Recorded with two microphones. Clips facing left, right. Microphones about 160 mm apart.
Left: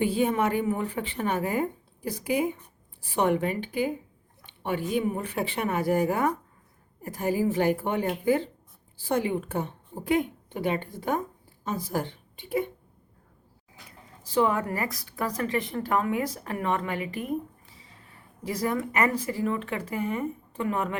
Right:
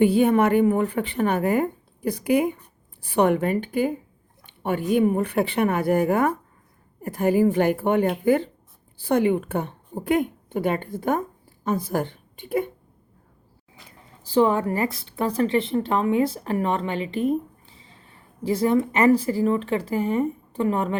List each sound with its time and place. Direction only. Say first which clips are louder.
0.0 s a woman's voice: right 7 dB; 60° right (ahead or behind)
9.9 s a woman's voice: right 4 dB; 45° right (ahead or behind)
14.3 s a woman's voice: right 5 dB; 30° right (ahead or behind)